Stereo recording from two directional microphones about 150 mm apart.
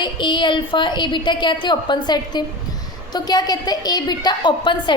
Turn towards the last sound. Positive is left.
turn(degrees=30)  # may be behind; listen again after turning